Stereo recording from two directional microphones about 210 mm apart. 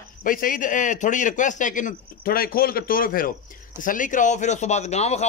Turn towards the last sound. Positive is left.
turn(degrees=30)  # may be behind; listen again after turning